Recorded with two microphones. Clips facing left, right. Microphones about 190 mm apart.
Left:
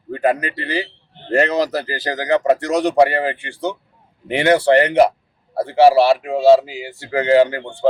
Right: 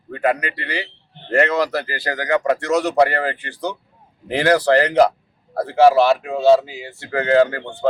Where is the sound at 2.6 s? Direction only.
35° left (ahead or behind).